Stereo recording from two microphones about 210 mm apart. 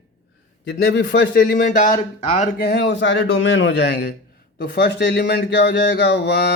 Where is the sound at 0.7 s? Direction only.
60° left (ahead or behind).